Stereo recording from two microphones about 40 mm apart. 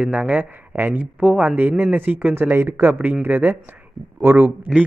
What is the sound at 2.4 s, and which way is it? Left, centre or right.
Speech, right.